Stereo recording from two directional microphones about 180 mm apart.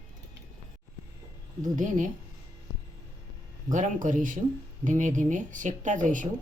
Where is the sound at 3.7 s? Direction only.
45° right (ahead or behind).